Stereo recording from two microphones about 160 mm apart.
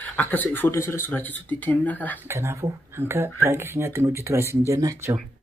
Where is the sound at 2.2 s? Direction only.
15° right (ahead or behind).